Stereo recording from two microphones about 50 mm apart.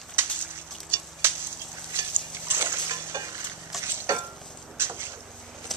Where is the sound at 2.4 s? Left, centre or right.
Right.